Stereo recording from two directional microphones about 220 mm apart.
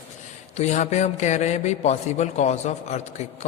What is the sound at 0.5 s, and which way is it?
A man's voice, 30° left (ahead or behind).